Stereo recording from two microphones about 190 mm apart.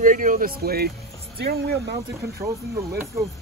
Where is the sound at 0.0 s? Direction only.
45° right (ahead or behind).